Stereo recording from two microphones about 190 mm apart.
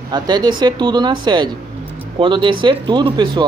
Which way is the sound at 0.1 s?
20° right (ahead or behind).